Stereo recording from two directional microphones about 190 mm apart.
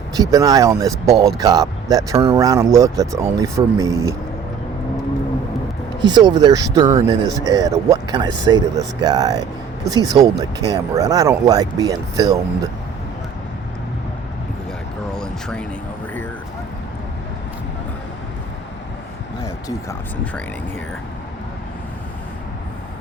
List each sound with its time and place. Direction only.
0.2 s speech: 20° right (ahead or behind)
6.0 s speech: 25° right (ahead or behind)
15.1 s a sound: 5° left (ahead or behind)